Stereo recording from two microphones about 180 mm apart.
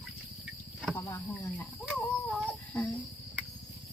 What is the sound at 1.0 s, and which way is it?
Cricket, 15° left (ahead or behind).